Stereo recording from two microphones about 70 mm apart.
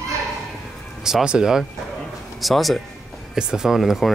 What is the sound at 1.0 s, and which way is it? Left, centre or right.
Speech, centre.